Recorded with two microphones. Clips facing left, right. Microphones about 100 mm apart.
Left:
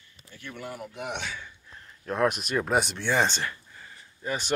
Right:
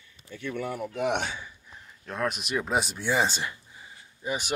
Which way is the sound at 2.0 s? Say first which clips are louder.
Left 5 dB; 5° left (ahead or behind).